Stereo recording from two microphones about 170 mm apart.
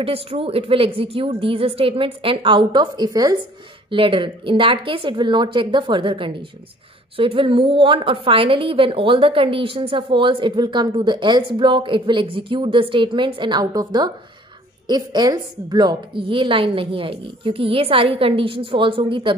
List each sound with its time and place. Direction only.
0.0 s a woman's voice: 35° right (ahead or behind)